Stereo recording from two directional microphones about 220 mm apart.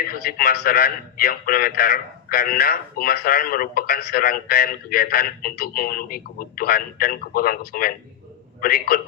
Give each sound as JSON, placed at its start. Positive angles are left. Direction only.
{"t": 0.0, "sound": "a man's voice", "side_deg": 40}